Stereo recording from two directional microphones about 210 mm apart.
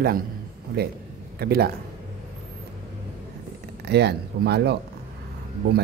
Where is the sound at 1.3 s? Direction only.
50° right (ahead or behind).